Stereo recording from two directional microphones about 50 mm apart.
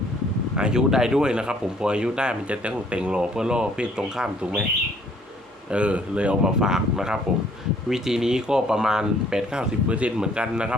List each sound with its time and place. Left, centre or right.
0.5 s speech: centre
5.7 s a man's voice: right
6.4 s a man's voice: centre